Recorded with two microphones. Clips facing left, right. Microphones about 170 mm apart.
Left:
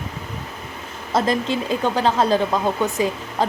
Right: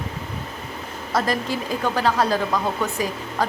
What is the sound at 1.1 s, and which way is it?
Speech, 25° left (ahead or behind).